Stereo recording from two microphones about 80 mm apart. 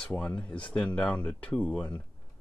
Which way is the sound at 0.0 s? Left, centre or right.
Centre.